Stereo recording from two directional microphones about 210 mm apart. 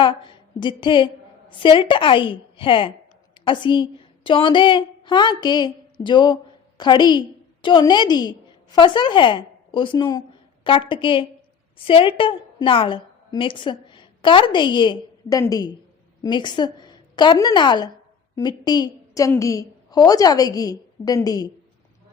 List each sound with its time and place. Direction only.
0.0 s a woman's voice: 25° left (ahead or behind)